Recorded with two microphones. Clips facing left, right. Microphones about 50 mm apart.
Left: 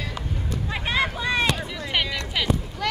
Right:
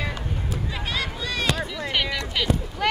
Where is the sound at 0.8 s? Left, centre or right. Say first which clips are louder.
Left 7 dB; left.